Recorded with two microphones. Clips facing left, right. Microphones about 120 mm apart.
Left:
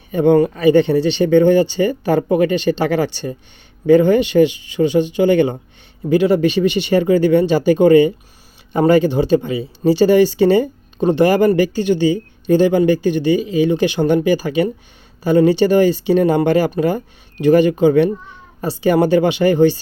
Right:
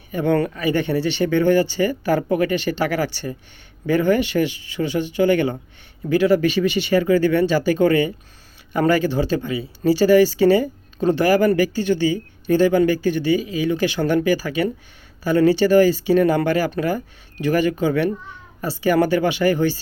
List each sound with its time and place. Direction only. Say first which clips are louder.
0.1 s speech: left 7 dB; 25° left (ahead or behind)